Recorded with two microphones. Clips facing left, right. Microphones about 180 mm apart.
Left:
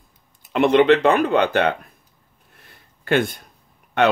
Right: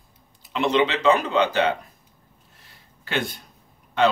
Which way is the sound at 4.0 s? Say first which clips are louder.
Left 3 dB; 65° left (ahead or behind).